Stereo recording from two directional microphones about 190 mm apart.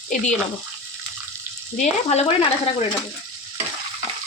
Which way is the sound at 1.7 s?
35° left (ahead or behind).